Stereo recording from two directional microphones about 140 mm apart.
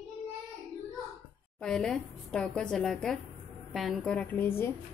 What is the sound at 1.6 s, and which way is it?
A woman's voice, 5° left (ahead or behind).